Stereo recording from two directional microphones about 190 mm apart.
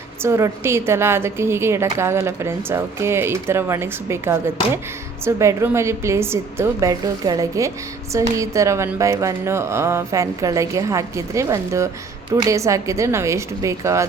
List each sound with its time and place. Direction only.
0.2 s a woman's voice: 15° right (ahead or behind)